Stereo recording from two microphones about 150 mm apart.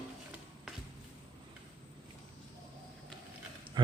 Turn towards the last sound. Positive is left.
turn(degrees=-30)  # may be behind; listen again after turning